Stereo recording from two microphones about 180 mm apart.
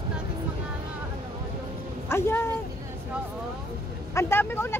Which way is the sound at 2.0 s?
15° left (ahead or behind).